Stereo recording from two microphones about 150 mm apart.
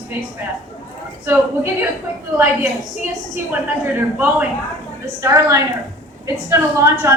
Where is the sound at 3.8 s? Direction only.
10° right (ahead or behind).